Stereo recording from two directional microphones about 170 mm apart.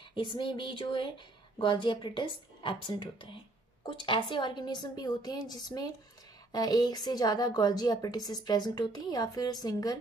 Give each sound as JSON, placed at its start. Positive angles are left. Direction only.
{"t": 0.1, "sound": "a woman's voice", "side_deg": 30}